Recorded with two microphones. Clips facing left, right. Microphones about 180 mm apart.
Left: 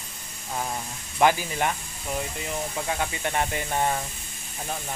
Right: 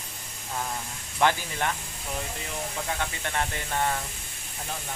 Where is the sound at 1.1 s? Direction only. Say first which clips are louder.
Left 3 dB; 15° left (ahead or behind).